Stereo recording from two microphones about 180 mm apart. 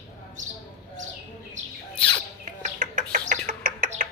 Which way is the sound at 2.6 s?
45° right (ahead or behind).